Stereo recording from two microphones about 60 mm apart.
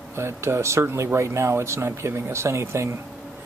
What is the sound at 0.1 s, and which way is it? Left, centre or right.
Speech, right.